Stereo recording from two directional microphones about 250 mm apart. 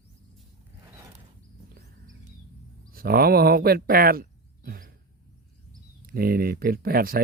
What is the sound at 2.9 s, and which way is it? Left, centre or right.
Speech, right.